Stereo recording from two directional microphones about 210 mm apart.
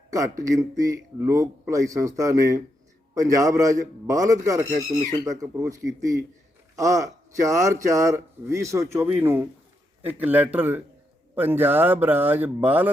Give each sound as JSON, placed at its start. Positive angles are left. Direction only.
{"t": 0.1, "sound": "speech", "side_deg": -15}